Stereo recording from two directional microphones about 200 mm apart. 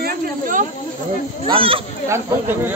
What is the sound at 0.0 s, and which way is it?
Snake, 40° right (ahead or behind).